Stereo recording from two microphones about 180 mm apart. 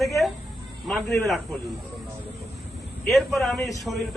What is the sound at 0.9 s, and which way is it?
Speech, centre (ahead or behind).